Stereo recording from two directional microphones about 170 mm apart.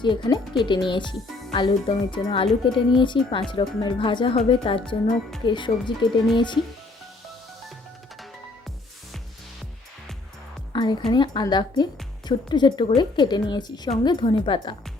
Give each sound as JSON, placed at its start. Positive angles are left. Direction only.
{"t": 0.0, "sound": "speech", "side_deg": 25}
{"t": 10.7, "sound": "music", "side_deg": 25}
{"t": 11.1, "sound": "speech", "side_deg": 25}